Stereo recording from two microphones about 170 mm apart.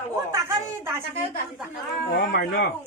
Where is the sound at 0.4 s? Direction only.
15° right (ahead or behind).